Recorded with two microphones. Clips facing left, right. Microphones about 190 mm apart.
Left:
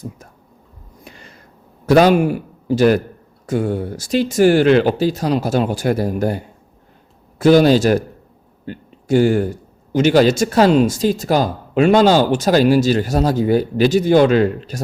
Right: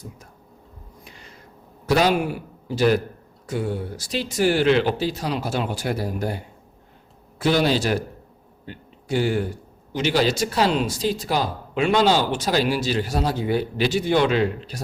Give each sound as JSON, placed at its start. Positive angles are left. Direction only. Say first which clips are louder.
{"t": 1.9, "sound": "a man's voice", "louder": "left 8 dB", "side_deg": 50}